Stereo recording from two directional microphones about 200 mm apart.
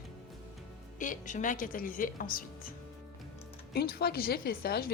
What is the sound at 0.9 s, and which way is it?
Speech, 40° left (ahead or behind).